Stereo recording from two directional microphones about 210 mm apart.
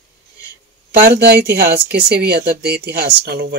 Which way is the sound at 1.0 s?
50° right (ahead or behind).